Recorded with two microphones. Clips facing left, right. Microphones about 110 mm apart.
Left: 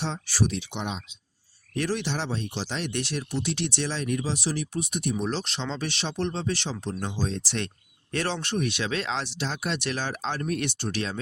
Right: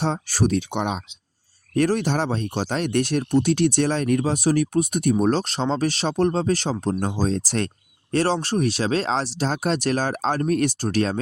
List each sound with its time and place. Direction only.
0.0 s speech: 45° right (ahead or behind)